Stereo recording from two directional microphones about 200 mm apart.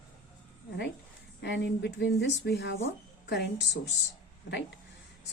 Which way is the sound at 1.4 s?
60° left (ahead or behind).